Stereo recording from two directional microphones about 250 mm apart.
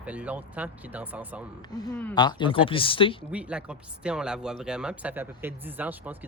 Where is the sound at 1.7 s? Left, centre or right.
Centre.